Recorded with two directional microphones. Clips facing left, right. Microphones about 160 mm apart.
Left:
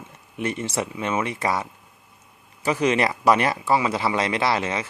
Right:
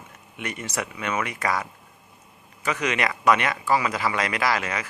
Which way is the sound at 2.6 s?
30° left (ahead or behind).